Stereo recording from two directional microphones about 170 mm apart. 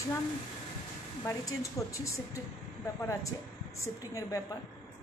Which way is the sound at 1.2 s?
15° left (ahead or behind).